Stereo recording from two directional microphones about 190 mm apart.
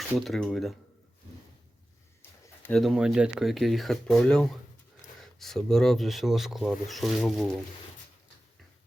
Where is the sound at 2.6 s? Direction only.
Centre (ahead or behind).